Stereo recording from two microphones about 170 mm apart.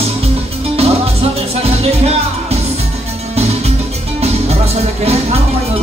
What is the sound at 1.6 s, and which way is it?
Music, 35° right (ahead or behind).